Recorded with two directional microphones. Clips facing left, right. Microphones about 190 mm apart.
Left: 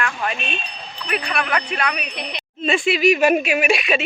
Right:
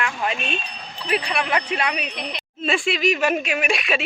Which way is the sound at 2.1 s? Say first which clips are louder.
Even; centre (ahead or behind).